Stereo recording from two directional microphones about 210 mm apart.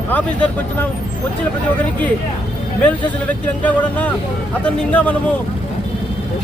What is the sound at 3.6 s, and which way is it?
Speech, 5° left (ahead or behind).